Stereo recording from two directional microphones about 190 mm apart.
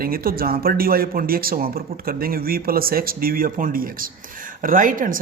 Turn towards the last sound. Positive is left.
turn(degrees=-45)  # may be behind; listen again after turning